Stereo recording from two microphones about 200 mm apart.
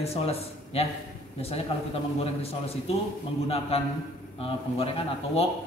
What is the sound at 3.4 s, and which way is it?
Speech, 30° left (ahead or behind).